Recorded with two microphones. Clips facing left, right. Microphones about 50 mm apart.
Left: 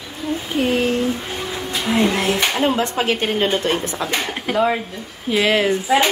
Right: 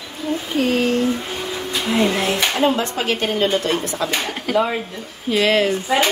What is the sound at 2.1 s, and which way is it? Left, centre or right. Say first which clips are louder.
Speech: left 1 dB; left.